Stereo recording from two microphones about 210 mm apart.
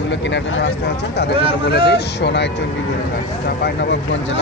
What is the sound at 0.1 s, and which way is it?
Speech, 60° left (ahead or behind).